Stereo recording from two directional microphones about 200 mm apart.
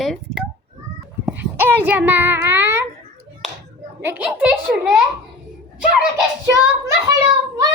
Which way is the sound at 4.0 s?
10° right (ahead or behind).